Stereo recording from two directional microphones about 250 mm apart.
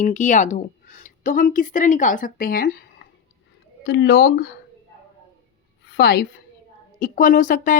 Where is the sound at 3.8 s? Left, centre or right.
Left.